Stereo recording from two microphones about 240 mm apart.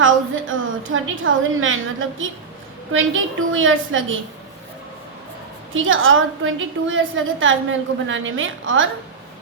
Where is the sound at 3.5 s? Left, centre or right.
Right.